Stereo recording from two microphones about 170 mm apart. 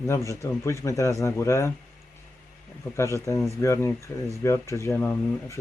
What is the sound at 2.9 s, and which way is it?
Speech, 15° left (ahead or behind).